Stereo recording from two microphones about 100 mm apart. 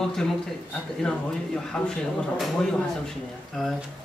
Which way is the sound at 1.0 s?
5° left (ahead or behind).